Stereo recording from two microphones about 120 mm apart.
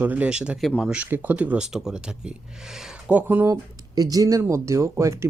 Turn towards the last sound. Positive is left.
turn(degrees=-25)  # may be behind; listen again after turning